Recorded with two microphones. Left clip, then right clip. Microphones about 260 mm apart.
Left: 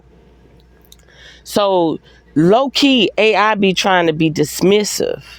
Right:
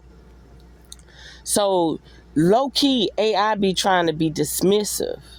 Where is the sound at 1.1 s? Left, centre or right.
Centre.